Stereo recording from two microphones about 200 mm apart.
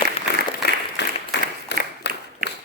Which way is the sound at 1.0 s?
60° left (ahead or behind).